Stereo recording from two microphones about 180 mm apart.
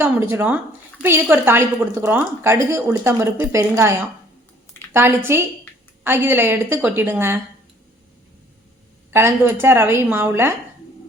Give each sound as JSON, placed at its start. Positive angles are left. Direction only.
{"t": 0.0, "sound": "a woman's voice", "side_deg": -10}
{"t": 4.9, "sound": "a woman's voice", "side_deg": -15}
{"t": 9.1, "sound": "a woman's voice", "side_deg": -15}